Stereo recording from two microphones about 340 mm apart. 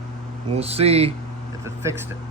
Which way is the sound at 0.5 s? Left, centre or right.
Centre.